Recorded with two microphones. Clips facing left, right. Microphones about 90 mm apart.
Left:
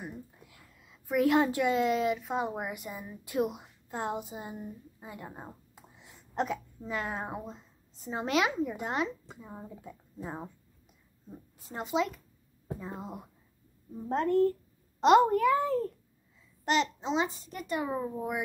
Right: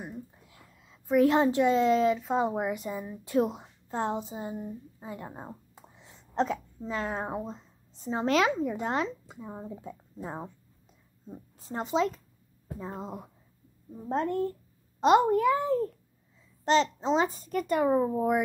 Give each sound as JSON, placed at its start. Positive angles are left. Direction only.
{"t": 0.0, "sound": "a woman's voice", "side_deg": -25}
{"t": 5.8, "sound": "a sound", "side_deg": -30}
{"t": 8.6, "sound": "speech", "side_deg": -35}
{"t": 9.4, "sound": "speech", "side_deg": -20}
{"t": 11.6, "sound": "speech", "side_deg": -30}
{"t": 16.6, "sound": "a child's voice", "side_deg": -35}